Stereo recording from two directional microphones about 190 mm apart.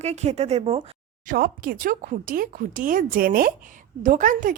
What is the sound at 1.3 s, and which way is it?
A woman's voice, 50° right (ahead or behind).